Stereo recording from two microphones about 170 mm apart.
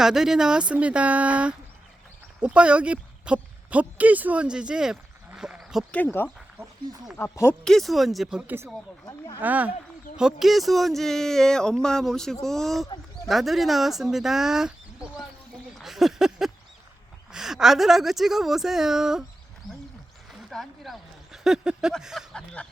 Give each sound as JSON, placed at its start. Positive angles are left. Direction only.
{"t": 0.0, "sound": "speech", "side_deg": -5}
{"t": 5.9, "sound": "speech", "side_deg": 10}
{"t": 7.6, "sound": "speech", "side_deg": 0}
{"t": 9.0, "sound": "speech", "side_deg": 20}
{"t": 9.4, "sound": "speech", "side_deg": -10}
{"t": 15.8, "sound": "a sound", "side_deg": 0}
{"t": 17.3, "sound": "speech", "side_deg": -5}
{"t": 20.5, "sound": "speech", "side_deg": 0}